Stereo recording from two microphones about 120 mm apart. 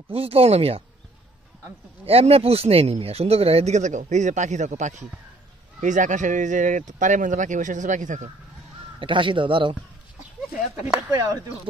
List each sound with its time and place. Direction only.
0.1 s speech: 55° right (ahead or behind)
2.0 s speech: 55° right (ahead or behind); by 8.3 s 90° right
9.0 s speech: 45° right (ahead or behind)
11.1 s speech: 35° right (ahead or behind)